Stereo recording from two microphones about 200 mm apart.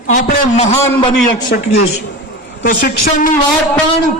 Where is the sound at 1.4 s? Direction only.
50° left (ahead or behind).